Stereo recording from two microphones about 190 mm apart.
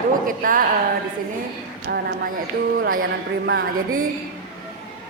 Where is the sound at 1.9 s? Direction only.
60° right (ahead or behind).